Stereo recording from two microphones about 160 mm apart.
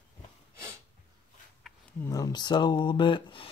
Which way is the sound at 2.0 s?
20° left (ahead or behind).